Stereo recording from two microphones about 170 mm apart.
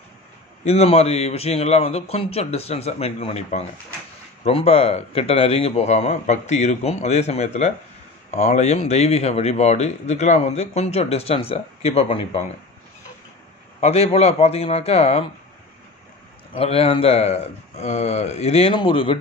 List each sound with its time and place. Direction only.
0.7 s speech: 40° left (ahead or behind)
13.7 s speech: 35° left (ahead or behind)
16.5 s speech: 35° left (ahead or behind)